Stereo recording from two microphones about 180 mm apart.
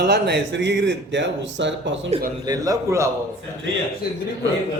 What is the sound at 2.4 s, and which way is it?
Speech, 20° right (ahead or behind).